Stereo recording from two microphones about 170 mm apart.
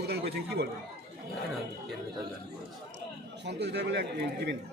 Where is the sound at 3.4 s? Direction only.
85° right.